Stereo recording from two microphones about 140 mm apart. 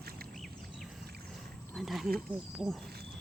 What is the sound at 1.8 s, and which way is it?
Speech, centre (ahead or behind).